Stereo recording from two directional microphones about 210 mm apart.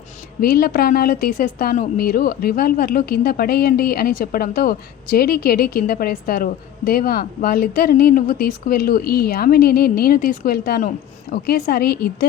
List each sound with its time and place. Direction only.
0.4 s a woman's voice: 45° left (ahead or behind)